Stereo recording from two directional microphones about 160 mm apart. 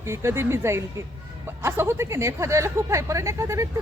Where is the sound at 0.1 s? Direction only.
15° right (ahead or behind).